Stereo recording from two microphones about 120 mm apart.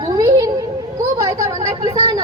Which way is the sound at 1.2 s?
25° right (ahead or behind).